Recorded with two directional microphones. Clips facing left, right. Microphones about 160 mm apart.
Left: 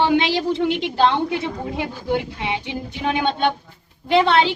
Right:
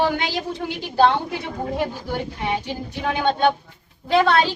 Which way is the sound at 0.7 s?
75° left (ahead or behind).